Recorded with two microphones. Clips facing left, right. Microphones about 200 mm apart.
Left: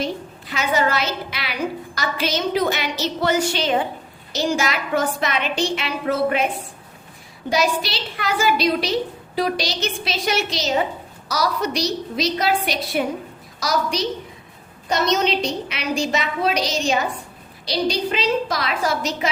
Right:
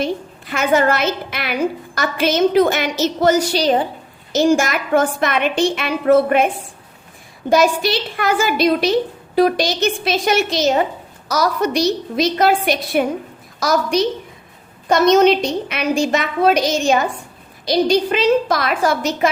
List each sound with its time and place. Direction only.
0.5 s a woman's voice: 50° right (ahead or behind)
4.3 s a woman's voice: 50° right (ahead or behind)
7.5 s a woman's voice: 50° right (ahead or behind)